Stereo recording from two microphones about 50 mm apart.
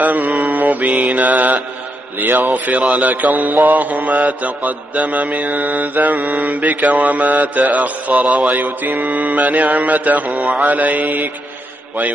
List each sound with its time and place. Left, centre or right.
0.0 s mantra: right
2.1 s mantra: right